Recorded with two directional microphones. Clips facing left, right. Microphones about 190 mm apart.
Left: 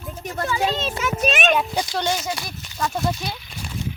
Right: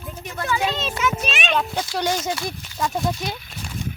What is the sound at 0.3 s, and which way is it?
Speech, 35° left (ahead or behind).